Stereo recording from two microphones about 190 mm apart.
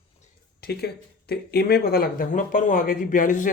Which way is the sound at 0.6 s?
55° left (ahead or behind).